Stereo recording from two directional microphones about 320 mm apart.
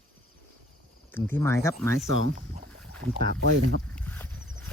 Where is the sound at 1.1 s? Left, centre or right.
Centre.